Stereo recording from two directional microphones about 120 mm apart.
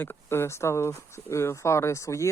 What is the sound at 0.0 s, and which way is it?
Speech, 20° left (ahead or behind).